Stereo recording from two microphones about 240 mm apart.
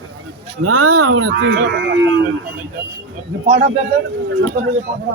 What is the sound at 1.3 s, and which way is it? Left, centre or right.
Speech, right.